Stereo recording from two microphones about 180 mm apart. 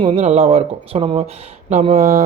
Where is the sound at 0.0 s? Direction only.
35° right (ahead or behind).